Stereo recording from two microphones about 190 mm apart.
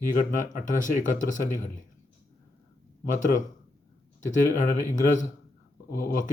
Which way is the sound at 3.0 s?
45° left (ahead or behind).